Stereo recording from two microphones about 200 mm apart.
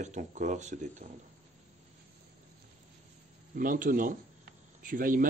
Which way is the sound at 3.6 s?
40° right (ahead or behind).